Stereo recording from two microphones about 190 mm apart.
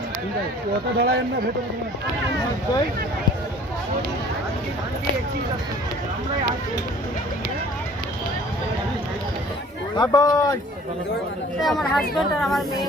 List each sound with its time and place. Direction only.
0.9 s speech: 55° right (ahead or behind)
10.0 s speech: 20° left (ahead or behind)
11.6 s speech: centre (ahead or behind)